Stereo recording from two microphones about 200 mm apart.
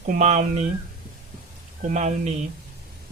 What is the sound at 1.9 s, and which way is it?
Speech, 35° right (ahead or behind).